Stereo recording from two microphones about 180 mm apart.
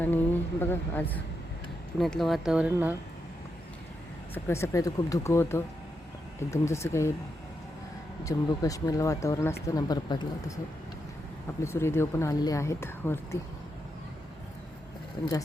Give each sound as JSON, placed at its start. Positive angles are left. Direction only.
{"t": 0.6, "sound": "speech", "side_deg": 10}
{"t": 4.4, "sound": "speech", "side_deg": 15}
{"t": 8.2, "sound": "speech", "side_deg": 20}
{"t": 11.6, "sound": "speech", "side_deg": 15}
{"t": 15.2, "sound": "speech", "side_deg": 20}